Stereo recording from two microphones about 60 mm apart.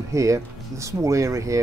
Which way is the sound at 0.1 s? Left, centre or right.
Right.